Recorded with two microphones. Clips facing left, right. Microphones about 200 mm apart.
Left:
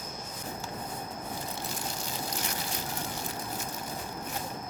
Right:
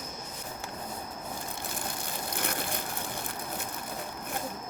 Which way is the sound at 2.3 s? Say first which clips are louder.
Right 2 dB; 55° right (ahead or behind).